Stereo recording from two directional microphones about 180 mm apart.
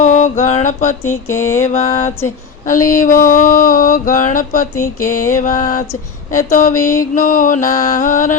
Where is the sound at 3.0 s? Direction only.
50° left (ahead or behind).